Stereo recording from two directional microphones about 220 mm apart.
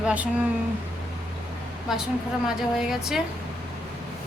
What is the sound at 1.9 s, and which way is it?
A woman's voice, centre (ahead or behind).